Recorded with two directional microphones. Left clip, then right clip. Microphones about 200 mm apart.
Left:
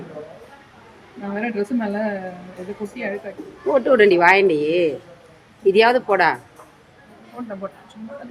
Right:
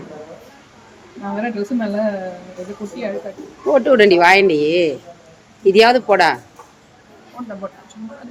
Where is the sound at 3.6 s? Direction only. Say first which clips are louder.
Right 3 dB; 15° right (ahead or behind).